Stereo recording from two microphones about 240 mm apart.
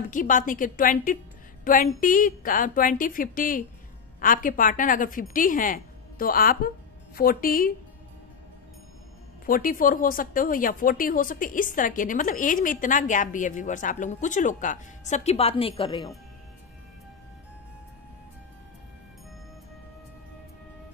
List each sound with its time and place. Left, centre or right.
0.1 s speech: left
9.5 s speech: left; by 16.2 s centre